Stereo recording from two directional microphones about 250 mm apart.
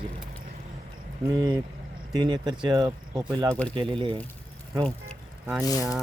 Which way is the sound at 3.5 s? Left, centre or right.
Centre.